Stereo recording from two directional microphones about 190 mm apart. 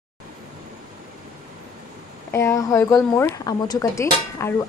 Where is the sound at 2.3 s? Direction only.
15° left (ahead or behind).